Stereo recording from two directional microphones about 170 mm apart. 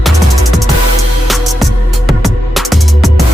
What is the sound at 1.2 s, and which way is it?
Music, centre (ahead or behind).